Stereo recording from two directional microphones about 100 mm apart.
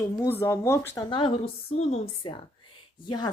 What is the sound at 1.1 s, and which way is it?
A woman's voice, 65° left (ahead or behind).